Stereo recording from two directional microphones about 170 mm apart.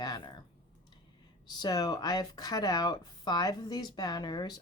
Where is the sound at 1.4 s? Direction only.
25° left (ahead or behind).